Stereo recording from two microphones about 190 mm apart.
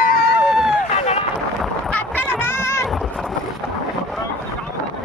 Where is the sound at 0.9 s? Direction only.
35° left (ahead or behind).